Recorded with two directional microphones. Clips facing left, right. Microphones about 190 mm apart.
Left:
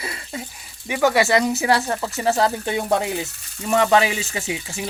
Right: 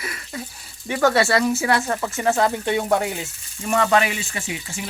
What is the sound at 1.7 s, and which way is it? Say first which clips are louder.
Speech: left 1 dB; 30° left (ahead or behind).